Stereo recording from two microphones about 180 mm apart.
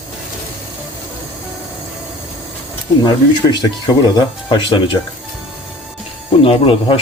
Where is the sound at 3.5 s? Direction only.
20° left (ahead or behind).